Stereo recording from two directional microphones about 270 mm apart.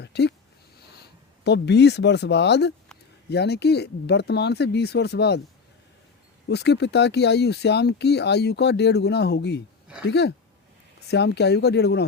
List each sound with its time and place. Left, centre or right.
0.0 s a sound: left
1.5 s speech: left
6.5 s speech: left